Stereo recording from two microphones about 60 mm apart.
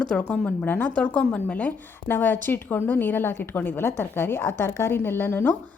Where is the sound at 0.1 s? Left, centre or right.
Centre.